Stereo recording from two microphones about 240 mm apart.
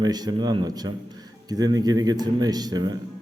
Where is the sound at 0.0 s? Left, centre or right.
Centre.